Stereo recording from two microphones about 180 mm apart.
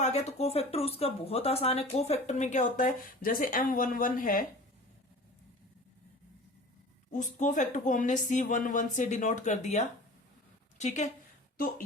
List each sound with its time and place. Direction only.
0.0 s a woman's voice: 35° left (ahead or behind)
7.1 s a woman's voice: 45° left (ahead or behind)